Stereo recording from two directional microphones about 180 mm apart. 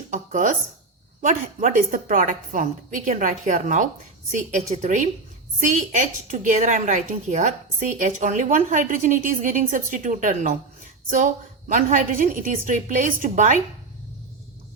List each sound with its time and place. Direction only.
0.1 s a woman's voice: 45° right (ahead or behind)
11.7 s a woman's voice: 45° right (ahead or behind)